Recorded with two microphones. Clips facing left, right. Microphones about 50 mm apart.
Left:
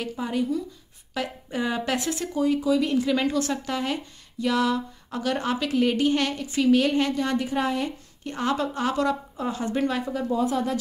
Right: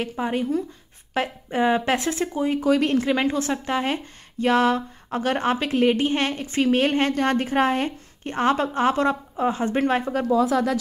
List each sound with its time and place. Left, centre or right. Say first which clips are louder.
0.0 s a woman's voice: right 2 dB; right
2.6 s speech: right 3 dB; right
3.1 s a woman's voice: right 2 dB; right
10.5 s speech: right 4 dB; right